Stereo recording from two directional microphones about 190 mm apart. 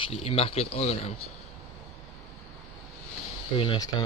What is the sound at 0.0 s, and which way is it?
Speech, 30° left (ahead or behind).